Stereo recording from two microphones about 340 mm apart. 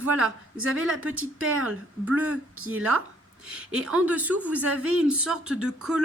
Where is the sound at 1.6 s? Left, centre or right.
Centre.